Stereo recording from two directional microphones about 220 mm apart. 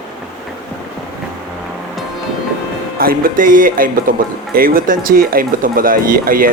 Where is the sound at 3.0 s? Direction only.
40° right (ahead or behind).